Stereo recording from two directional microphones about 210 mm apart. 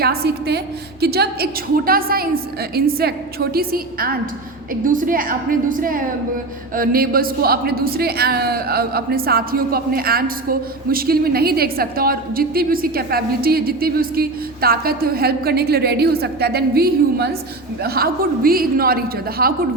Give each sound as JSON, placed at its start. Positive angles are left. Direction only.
{"t": 0.0, "sound": "a woman's voice", "side_deg": -50}